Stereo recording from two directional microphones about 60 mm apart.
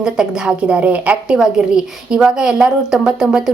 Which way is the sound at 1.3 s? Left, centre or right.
Centre.